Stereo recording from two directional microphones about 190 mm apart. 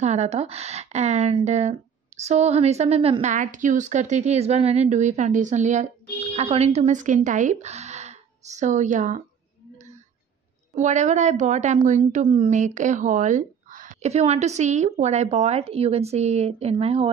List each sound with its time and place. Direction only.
0.0 s a woman's voice: 35° right (ahead or behind)
10.7 s a woman's voice: 40° right (ahead or behind)